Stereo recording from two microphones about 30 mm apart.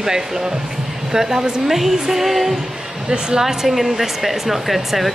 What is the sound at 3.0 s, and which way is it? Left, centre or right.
Speech, right.